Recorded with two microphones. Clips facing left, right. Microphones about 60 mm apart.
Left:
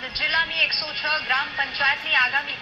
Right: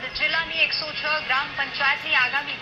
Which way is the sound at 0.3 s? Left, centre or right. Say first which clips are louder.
Left 2 dB; left.